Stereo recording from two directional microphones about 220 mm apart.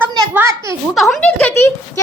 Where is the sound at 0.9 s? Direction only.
5° left (ahead or behind).